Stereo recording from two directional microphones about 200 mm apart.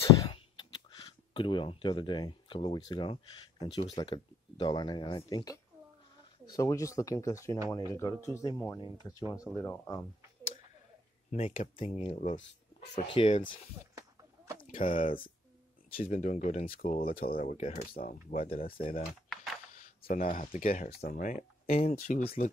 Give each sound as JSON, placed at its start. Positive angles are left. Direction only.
{"t": 0.2, "sound": "speech", "side_deg": 25}
{"t": 11.3, "sound": "speech", "side_deg": 30}
{"t": 14.7, "sound": "speech", "side_deg": 45}
{"t": 15.9, "sound": "speech", "side_deg": 30}
{"t": 17.4, "sound": "speech", "side_deg": 35}
{"t": 19.2, "sound": "a sound", "side_deg": 0}
{"t": 20.1, "sound": "speech", "side_deg": 45}